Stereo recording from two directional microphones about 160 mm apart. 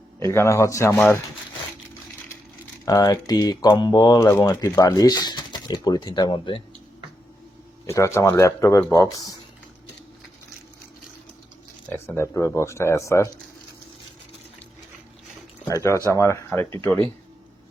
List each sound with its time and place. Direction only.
0.2 s speech: 15° left (ahead or behind)
2.8 s speech: 20° left (ahead or behind)
7.9 s speech: 20° left (ahead or behind)
11.9 s speech: 15° left (ahead or behind)
15.6 s speech: 20° left (ahead or behind)